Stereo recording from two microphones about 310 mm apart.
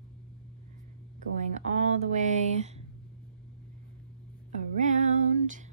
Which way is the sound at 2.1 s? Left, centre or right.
Right.